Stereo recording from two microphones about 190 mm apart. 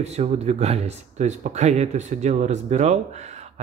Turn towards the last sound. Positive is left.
turn(degrees=-35)  # may be behind; listen again after turning